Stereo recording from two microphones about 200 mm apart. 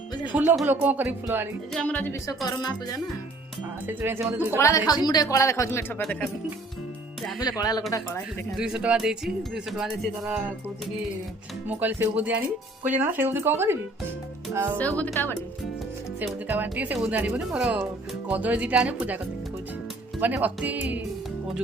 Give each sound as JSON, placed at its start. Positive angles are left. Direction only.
{"t": 0.3, "sound": "speech", "side_deg": -10}
{"t": 1.7, "sound": "speech", "side_deg": 5}
{"t": 2.5, "sound": "speech", "side_deg": 20}
{"t": 3.8, "sound": "speech", "side_deg": -10}
{"t": 4.5, "sound": "speech", "side_deg": 15}
{"t": 7.6, "sound": "speech", "side_deg": 20}
{"t": 8.5, "sound": "speech", "side_deg": -5}
{"t": 11.7, "sound": "speech", "side_deg": -10}
{"t": 14.8, "sound": "speech", "side_deg": 5}
{"t": 16.5, "sound": "speech", "side_deg": -10}
{"t": 20.2, "sound": "speech", "side_deg": -10}